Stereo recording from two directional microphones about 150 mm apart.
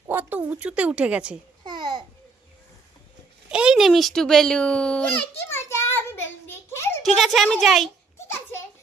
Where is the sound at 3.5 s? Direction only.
5° right (ahead or behind); by 7.0 s 15° left (ahead or behind).